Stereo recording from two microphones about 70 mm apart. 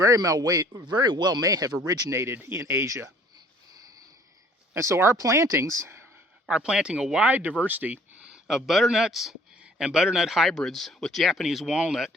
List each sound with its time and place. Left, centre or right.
0.0 s speech: right
2.0 s speech: right
4.7 s speech: right
6.5 s speech: centre
7.2 s speech: right
8.3 s speech: centre
10.5 s speech: centre